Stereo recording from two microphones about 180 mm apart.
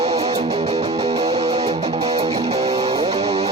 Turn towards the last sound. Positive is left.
turn(degrees=-35)  # may be behind; listen again after turning